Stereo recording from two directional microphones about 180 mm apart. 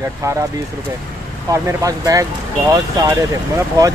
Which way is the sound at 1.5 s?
20° right (ahead or behind).